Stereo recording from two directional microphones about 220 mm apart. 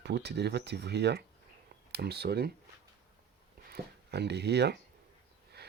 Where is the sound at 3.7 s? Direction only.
45° right (ahead or behind).